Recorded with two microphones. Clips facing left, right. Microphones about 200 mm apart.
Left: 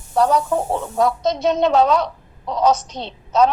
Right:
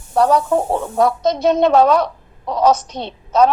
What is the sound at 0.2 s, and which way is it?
A woman's voice, 55° right (ahead or behind).